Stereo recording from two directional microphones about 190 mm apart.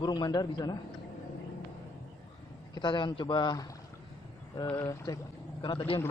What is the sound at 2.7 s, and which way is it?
Speech, 25° left (ahead or behind).